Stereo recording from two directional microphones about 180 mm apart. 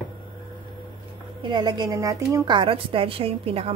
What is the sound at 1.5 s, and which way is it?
A woman's voice, 25° right (ahead or behind).